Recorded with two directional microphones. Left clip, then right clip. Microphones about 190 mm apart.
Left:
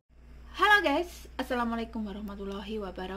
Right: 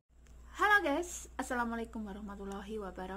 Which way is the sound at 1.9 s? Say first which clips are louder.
Left 6 dB; 10° left (ahead or behind).